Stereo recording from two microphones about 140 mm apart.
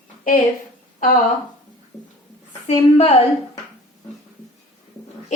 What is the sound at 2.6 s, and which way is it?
Speech, 45° left (ahead or behind).